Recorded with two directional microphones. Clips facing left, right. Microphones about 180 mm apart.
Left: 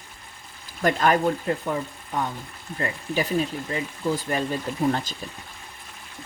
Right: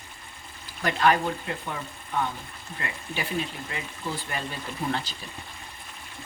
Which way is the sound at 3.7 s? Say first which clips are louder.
Left 8 dB; 40° left (ahead or behind).